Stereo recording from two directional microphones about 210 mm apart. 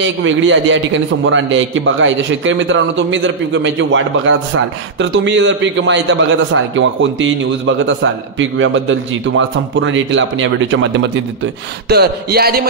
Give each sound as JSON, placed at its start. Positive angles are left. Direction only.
{"t": 0.0, "sound": "a man's voice", "side_deg": -65}
{"t": 11.9, "sound": "speech", "side_deg": -50}